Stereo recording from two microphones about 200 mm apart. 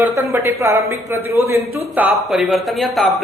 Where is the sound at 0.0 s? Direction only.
10° right (ahead or behind).